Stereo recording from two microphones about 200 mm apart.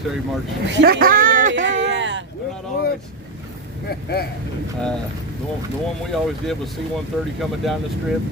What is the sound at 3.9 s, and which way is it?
Speech, 50° left (ahead or behind).